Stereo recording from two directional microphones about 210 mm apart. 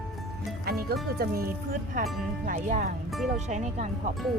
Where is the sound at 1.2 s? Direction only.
45° right (ahead or behind).